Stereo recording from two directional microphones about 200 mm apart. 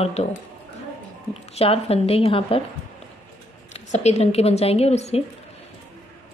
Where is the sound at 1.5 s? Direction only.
30° left (ahead or behind).